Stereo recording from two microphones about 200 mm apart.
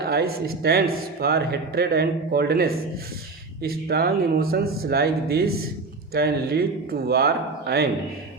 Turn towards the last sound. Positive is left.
turn(degrees=-50)  # may be behind; listen again after turning